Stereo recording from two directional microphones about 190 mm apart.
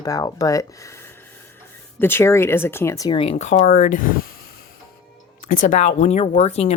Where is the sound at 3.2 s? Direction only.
35° left (ahead or behind).